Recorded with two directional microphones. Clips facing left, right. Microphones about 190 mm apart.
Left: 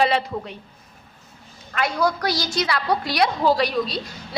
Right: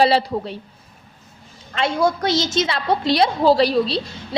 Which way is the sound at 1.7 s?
25° right (ahead or behind).